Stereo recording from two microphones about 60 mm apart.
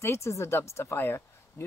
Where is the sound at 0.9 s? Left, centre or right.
Left.